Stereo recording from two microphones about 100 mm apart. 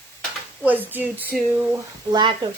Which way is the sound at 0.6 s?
15° right (ahead or behind).